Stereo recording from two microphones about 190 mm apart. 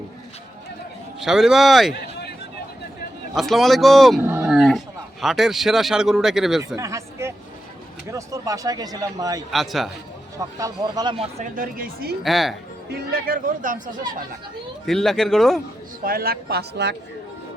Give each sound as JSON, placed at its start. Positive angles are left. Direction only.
{"t": 1.2, "sound": "a man's voice", "side_deg": 0}
{"t": 3.3, "sound": "a man's voice", "side_deg": 0}
{"t": 4.2, "sound": "dog", "side_deg": -10}
{"t": 4.5, "sound": "a man's voice", "side_deg": 0}
{"t": 6.7, "sound": "a sound", "side_deg": -15}
{"t": 8.1, "sound": "speech", "side_deg": -15}
{"t": 9.5, "sound": "a man's voice", "side_deg": 0}
{"t": 10.3, "sound": "speech", "side_deg": -20}
{"t": 12.2, "sound": "a man's voice", "side_deg": 0}
{"t": 12.9, "sound": "speech", "side_deg": -55}
{"t": 14.8, "sound": "a man's voice", "side_deg": 0}
{"t": 16.0, "sound": "speech", "side_deg": -50}